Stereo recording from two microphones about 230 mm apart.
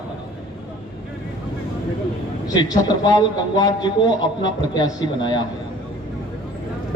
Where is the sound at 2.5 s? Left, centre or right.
Centre.